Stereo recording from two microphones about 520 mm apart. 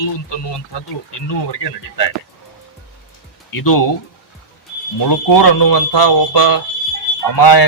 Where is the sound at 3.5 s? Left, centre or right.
Left.